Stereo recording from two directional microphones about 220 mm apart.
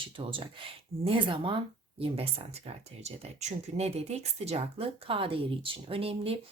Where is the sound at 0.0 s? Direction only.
25° right (ahead or behind).